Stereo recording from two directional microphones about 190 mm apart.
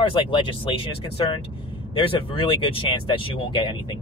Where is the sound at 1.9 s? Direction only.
25° left (ahead or behind).